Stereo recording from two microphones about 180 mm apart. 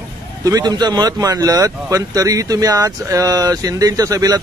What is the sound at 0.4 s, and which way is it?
Speech, 20° right (ahead or behind).